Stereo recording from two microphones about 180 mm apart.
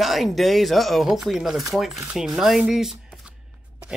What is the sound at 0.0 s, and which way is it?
Speech, centre (ahead or behind).